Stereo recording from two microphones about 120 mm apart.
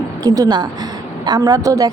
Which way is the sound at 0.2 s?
30° right (ahead or behind).